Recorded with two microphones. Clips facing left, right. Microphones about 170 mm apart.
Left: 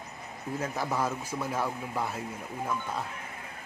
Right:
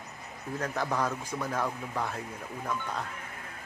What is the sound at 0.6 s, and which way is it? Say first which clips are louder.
A man's voice: even; 5° left (ahead or behind).